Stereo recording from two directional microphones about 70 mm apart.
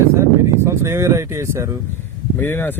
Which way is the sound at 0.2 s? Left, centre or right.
Right.